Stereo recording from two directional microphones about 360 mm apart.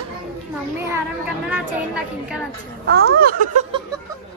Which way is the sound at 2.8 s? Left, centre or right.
Right.